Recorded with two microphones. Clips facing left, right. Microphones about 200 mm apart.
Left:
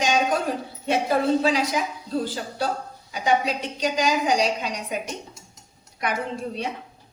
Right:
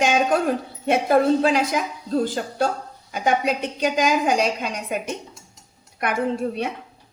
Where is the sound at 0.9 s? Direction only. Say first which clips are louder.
Right 4 dB; 50° right (ahead or behind).